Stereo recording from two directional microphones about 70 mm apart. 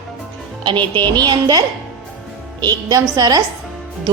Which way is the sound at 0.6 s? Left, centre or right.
Right.